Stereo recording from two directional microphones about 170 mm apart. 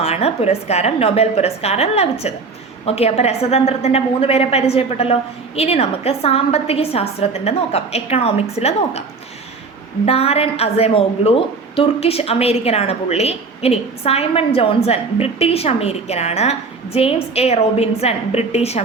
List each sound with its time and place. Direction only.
0.0 s a woman's voice: 35° left (ahead or behind)
10.1 s a woman's voice: 35° left (ahead or behind)